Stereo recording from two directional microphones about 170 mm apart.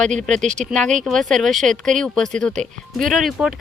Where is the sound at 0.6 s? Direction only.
5° left (ahead or behind).